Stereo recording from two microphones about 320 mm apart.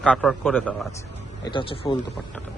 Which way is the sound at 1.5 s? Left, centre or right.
Centre.